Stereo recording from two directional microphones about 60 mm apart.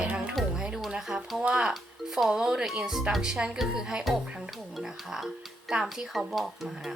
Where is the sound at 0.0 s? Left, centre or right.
Centre.